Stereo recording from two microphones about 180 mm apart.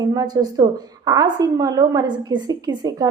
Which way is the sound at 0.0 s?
20° right (ahead or behind).